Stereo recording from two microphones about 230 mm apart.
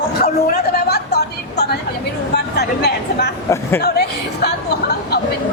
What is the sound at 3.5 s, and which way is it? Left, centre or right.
Speech, centre.